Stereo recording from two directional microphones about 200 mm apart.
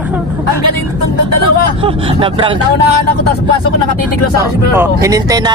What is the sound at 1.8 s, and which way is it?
Speech, 25° right (ahead or behind).